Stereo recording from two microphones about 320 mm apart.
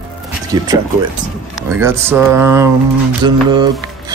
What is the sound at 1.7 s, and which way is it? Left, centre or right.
Speech, centre.